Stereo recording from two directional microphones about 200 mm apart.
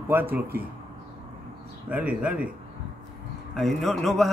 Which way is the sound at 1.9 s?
5° right (ahead or behind).